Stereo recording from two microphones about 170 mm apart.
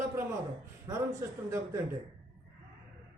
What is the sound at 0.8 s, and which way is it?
Speech, 20° right (ahead or behind).